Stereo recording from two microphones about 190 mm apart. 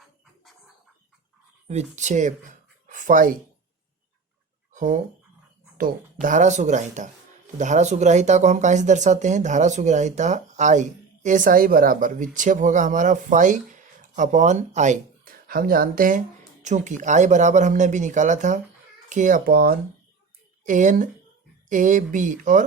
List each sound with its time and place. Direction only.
1.6 s speech: 35° right (ahead or behind)
4.7 s a sound: 40° right (ahead or behind)
5.7 s speech: 45° right (ahead or behind)
20.7 s speech: 40° right (ahead or behind)